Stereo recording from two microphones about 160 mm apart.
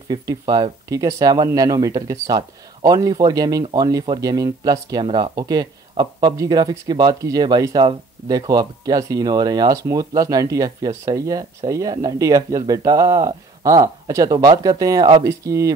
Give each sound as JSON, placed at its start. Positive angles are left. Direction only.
{"t": 0.1, "sound": "speech", "side_deg": -25}